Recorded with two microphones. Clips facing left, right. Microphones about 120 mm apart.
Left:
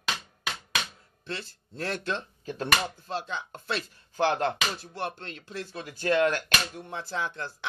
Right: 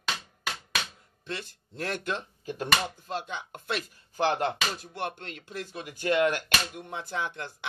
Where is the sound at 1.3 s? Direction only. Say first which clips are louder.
Even; 15° right (ahead or behind).